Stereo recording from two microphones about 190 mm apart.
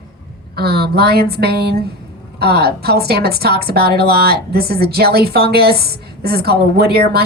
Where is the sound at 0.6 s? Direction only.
55° right (ahead or behind).